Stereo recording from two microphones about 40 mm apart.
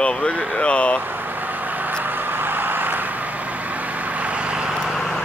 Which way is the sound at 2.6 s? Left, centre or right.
Right.